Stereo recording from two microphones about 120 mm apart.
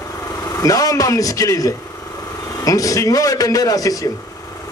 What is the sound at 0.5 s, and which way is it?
A man's voice, 30° left (ahead or behind).